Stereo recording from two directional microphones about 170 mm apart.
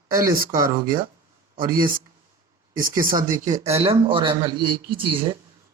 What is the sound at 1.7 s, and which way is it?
Speech, 55° right (ahead or behind).